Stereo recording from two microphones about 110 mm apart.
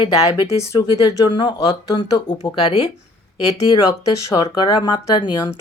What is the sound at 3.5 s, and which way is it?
Speech, 35° left (ahead or behind).